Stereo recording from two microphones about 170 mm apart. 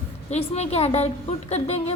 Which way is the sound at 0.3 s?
40° left (ahead or behind).